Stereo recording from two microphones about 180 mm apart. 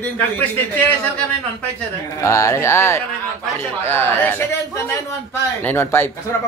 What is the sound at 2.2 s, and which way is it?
Speech, 15° left (ahead or behind).